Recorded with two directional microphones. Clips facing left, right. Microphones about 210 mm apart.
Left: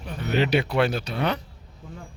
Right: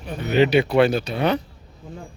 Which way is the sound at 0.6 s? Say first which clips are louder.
Right 6 dB; centre (ahead or behind).